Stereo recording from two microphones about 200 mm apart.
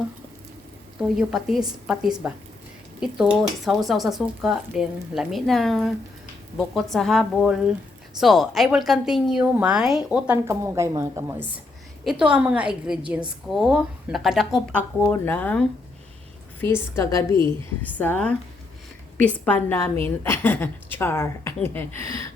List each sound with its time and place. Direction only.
1.0 s a woman's voice: centre (ahead or behind); by 17.3 s 15° left (ahead or behind)
17.3 s a woman's voice: 25° right (ahead or behind)
17.8 s a woman's voice: 10° left (ahead or behind)